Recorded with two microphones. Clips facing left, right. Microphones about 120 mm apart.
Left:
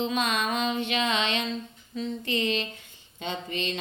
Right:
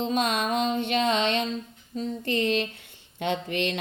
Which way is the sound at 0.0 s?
45° right (ahead or behind).